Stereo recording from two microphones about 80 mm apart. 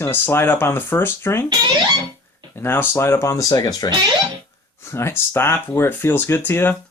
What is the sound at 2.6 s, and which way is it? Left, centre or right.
Speech, left.